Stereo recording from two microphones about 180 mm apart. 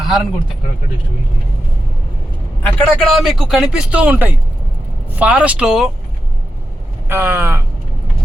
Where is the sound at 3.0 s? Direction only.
Centre (ahead or behind).